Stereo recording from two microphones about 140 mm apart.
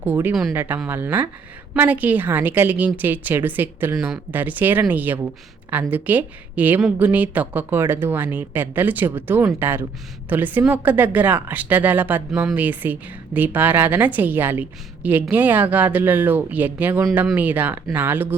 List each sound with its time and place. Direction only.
0.0 s a woman's voice: 15° right (ahead or behind)